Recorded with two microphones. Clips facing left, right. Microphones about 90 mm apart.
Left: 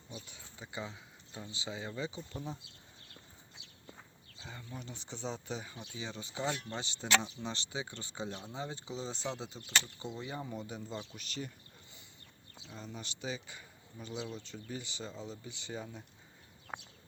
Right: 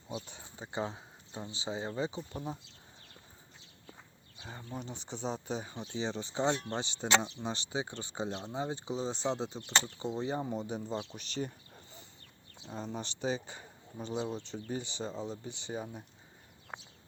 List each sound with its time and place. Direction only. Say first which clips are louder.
0.5 s speech: right 6 dB; 30° right (ahead or behind)
2.3 s speech: right 3 dB; 15° right (ahead or behind)
3.6 s walk: left 1 dB; 75° left (ahead or behind)
4.4 s speech: right 4 dB; 25° right (ahead or behind)
11.1 s a sound: right 5 dB; 35° right (ahead or behind)
12.6 s speech: right 7 dB; 40° right (ahead or behind); by 16.0 s 20° right (ahead or behind)